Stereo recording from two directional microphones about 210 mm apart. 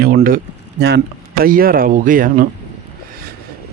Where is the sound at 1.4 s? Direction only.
45° right (ahead or behind).